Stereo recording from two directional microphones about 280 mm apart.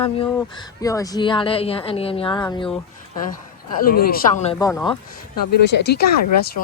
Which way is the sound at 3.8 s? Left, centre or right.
Left.